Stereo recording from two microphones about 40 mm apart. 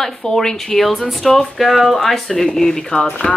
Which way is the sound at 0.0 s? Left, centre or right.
Centre.